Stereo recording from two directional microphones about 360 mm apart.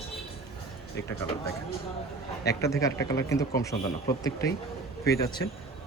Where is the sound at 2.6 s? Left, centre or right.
Centre.